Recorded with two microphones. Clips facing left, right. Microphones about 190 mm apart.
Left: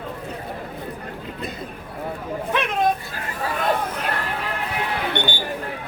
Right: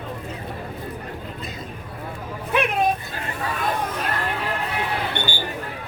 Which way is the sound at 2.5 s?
10° right (ahead or behind).